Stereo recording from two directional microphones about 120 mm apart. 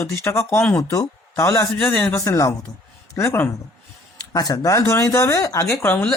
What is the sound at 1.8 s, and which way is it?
Speech, 10° left (ahead or behind).